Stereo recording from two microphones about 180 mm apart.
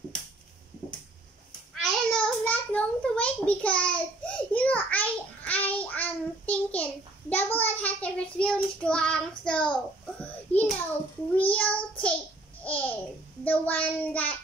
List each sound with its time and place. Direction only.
1.8 s a sound: 5° left (ahead or behind)
10.5 s child singing: 35° left (ahead or behind)
11.3 s child singing: 5° left (ahead or behind)
12.6 s babbling: 10° left (ahead or behind)
13.4 s child singing: 10° left (ahead or behind)